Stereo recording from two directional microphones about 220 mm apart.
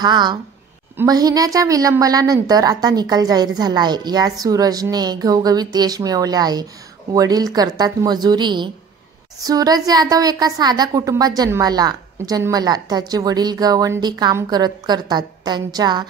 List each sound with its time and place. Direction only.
0.0 s a woman's voice: 20° right (ahead or behind)